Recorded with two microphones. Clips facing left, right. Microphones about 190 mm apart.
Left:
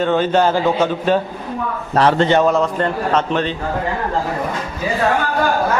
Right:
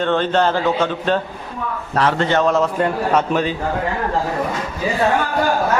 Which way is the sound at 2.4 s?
Centre (ahead or behind).